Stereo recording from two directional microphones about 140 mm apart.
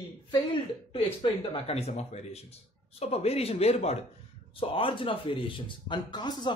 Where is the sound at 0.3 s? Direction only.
35° left (ahead or behind).